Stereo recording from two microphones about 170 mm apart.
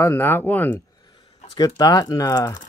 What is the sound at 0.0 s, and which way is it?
Speech, 15° left (ahead or behind).